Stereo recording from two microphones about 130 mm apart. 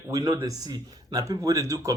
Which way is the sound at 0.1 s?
25° right (ahead or behind).